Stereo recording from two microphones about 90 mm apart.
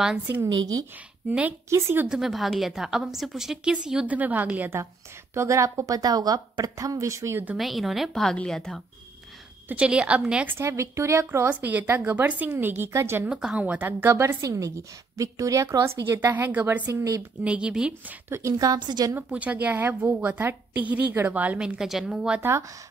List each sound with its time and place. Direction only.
1.7 s a woman's voice: 30° right (ahead or behind)
2.0 s a woman's voice: 5° right (ahead or behind)
5.3 s a woman's voice: 35° right (ahead or behind)
7.5 s a woman's voice: centre (ahead or behind)
9.7 s speech: 10° right (ahead or behind)
10.6 s a woman's voice: 35° right (ahead or behind)
11.4 s a woman's voice: 20° right (ahead or behind)
13.3 s a woman's voice: 10° right (ahead or behind)
14.4 s a woman's voice: 35° right (ahead or behind); by 16.8 s 20° right (ahead or behind)
16.8 s a woman's voice: 40° right (ahead or behind)
17.4 s speech: 15° right (ahead or behind)
18.3 s a woman's voice: 40° right (ahead or behind)
19.1 s a woman's voice: 15° right (ahead or behind)
22.4 s a woman's voice: 30° right (ahead or behind)